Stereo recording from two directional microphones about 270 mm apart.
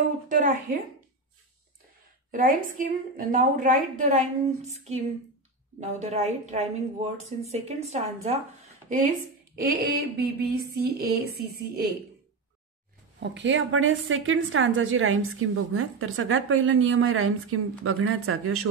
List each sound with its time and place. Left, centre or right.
0.3 s speech: right
2.3 s a woman's voice: right
13.2 s a woman's voice: right